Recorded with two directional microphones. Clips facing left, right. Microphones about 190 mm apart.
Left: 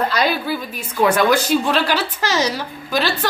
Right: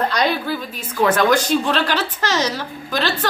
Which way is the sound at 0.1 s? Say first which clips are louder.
Even; 5° left (ahead or behind).